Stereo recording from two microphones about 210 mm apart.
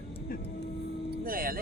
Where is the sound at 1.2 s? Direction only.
45° right (ahead or behind).